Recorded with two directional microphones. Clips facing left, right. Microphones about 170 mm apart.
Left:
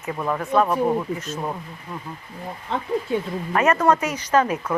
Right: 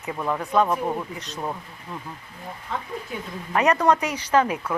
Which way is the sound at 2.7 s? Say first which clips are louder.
Left 4 dB; 30° left (ahead or behind).